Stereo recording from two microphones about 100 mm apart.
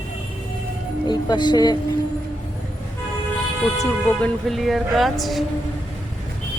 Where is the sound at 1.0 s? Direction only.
45° left (ahead or behind).